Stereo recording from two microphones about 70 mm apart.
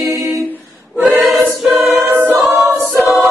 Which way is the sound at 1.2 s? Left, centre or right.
Centre.